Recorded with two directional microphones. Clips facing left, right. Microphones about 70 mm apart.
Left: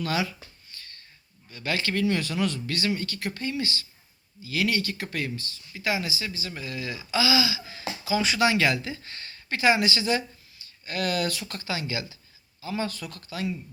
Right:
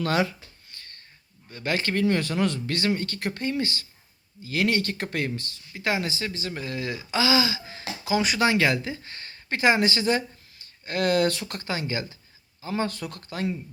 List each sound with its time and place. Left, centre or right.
0.0 s speech: right
0.8 s a sound: right
1.5 s speech: right